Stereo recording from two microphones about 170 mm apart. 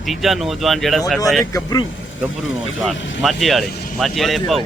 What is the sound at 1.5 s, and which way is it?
Speech, 20° left (ahead or behind).